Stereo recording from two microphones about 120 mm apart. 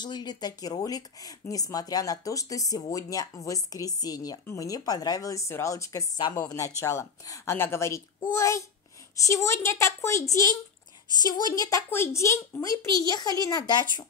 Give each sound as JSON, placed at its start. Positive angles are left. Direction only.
{"t": 0.0, "sound": "a woman's voice", "side_deg": 35}
{"t": 11.9, "sound": "speech", "side_deg": 20}